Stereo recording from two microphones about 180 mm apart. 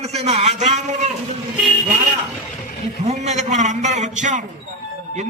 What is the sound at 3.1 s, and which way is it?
A man's voice, 40° right (ahead or behind).